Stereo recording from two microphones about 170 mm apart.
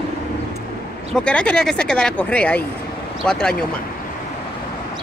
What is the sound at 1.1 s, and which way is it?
Speech, 5° left (ahead or behind).